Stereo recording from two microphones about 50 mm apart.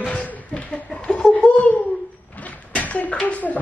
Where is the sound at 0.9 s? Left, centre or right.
Centre.